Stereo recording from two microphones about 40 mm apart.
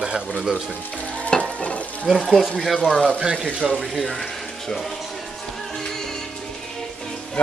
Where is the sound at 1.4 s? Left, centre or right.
Left.